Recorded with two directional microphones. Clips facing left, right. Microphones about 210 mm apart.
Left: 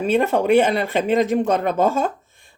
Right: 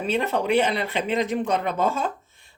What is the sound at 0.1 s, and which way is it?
Speech, 50° left (ahead or behind).